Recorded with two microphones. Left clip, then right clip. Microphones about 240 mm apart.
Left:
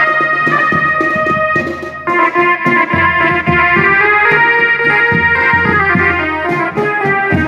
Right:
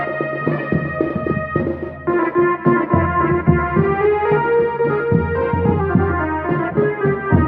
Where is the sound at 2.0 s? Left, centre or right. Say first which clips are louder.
Left 6 dB; centre.